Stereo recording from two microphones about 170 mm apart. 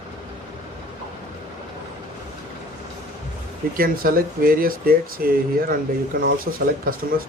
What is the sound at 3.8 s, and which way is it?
Speech, 55° right (ahead or behind).